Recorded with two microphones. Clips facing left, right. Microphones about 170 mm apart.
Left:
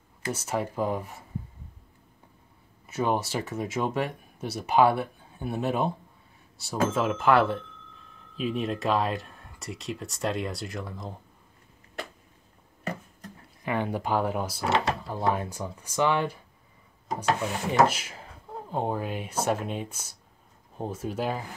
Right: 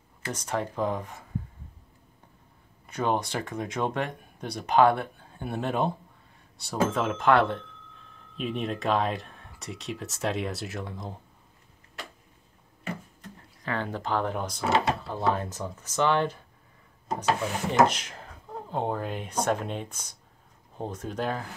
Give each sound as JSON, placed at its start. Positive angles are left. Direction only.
{"t": 0.2, "sound": "speech", "side_deg": 10}
{"t": 2.9, "sound": "speech", "side_deg": 5}
{"t": 13.7, "sound": "speech", "side_deg": 15}